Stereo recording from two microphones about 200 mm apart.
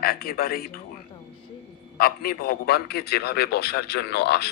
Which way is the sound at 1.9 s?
50° left (ahead or behind).